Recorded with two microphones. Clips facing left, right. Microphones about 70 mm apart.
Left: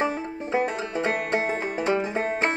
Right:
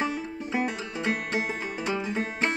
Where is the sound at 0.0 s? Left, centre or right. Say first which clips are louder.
Left 3 dB; left.